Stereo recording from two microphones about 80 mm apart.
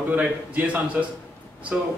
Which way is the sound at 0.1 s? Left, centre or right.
Centre.